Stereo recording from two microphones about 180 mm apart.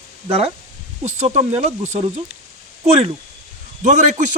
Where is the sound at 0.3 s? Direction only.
35° right (ahead or behind).